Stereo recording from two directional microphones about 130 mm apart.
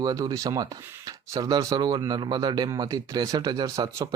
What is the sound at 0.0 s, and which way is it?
A man's voice, 25° right (ahead or behind).